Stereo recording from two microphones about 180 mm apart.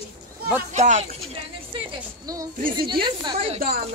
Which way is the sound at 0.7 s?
40° right (ahead or behind).